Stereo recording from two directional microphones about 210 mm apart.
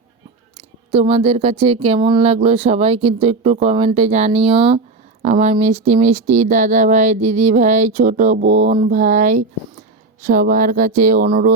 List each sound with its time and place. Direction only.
0.5 s speech: 30° right (ahead or behind)